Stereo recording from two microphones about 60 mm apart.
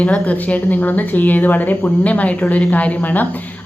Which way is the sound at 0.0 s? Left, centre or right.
Left.